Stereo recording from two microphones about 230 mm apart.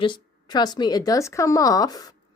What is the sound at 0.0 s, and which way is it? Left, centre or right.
Speech, centre.